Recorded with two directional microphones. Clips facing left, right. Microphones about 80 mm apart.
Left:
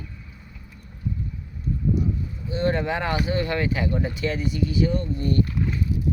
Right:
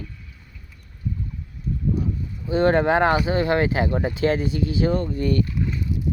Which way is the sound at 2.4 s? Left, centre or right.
Right.